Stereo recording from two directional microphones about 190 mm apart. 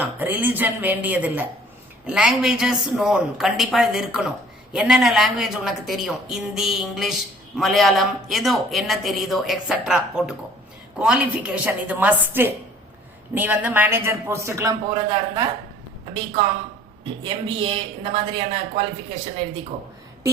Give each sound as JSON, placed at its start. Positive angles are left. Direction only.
{"t": 0.0, "sound": "a man's voice", "side_deg": -10}
{"t": 17.2, "sound": "a woman's voice", "side_deg": -30}